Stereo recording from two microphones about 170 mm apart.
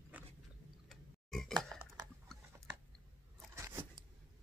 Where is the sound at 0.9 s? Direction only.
Centre (ahead or behind).